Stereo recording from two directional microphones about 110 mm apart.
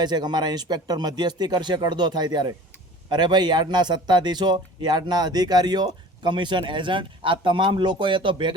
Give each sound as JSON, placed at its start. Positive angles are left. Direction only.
{"t": 0.0, "sound": "speech", "side_deg": -40}